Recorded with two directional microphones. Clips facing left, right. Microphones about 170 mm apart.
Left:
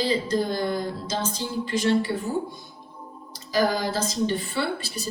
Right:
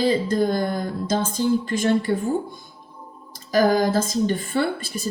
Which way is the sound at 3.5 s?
50° right (ahead or behind).